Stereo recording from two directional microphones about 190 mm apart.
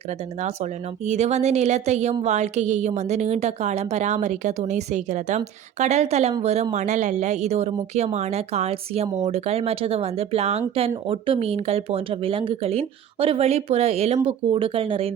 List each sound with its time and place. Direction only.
0.1 s speech: 35° right (ahead or behind)